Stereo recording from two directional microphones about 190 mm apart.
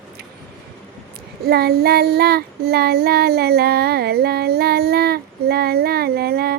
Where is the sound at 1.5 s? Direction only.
55° right (ahead or behind).